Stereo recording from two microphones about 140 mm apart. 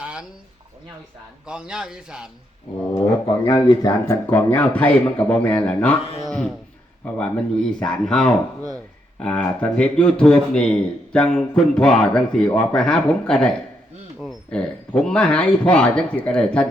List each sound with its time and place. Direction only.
0.0 s a sound: 10° right (ahead or behind)
1.5 s a man's voice: 5° right (ahead or behind)
3.4 s speech: 30° left (ahead or behind)
4.3 s speech: 15° left (ahead or behind)
7.0 s a man's voice: 5° left (ahead or behind)